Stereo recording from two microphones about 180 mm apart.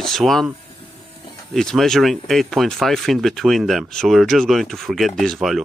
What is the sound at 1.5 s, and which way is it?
Speech, 5° left (ahead or behind).